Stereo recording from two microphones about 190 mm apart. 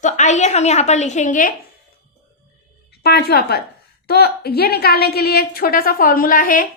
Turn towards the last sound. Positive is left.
turn(degrees=45)  # may be behind; listen again after turning